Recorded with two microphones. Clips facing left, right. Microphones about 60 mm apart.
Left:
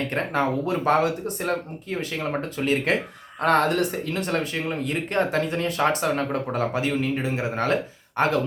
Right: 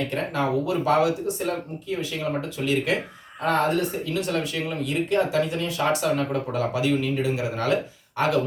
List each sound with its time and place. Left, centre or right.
0.1 s speech: left
3.4 s speech: left
4.1 s speech: left